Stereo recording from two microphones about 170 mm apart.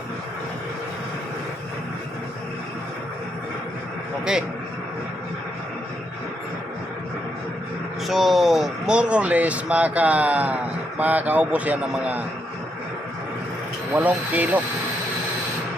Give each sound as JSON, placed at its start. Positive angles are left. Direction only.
{"t": 8.0, "sound": "speech", "side_deg": 0}
{"t": 13.9, "sound": "speech", "side_deg": -10}